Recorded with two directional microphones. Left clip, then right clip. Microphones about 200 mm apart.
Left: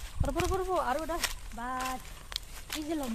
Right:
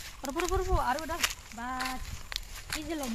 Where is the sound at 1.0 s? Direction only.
5° left (ahead or behind).